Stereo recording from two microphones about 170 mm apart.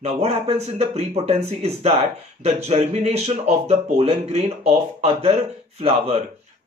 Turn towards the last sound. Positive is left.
turn(degrees=-35)  # may be behind; listen again after turning